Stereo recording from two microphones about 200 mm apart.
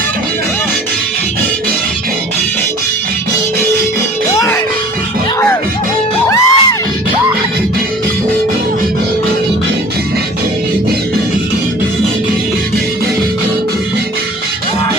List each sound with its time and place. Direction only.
4.4 s music: 15° left (ahead or behind)
6.2 s music: 15° left (ahead or behind)